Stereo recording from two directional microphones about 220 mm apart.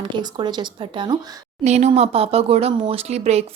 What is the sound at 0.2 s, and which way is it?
Speech, 20° right (ahead or behind).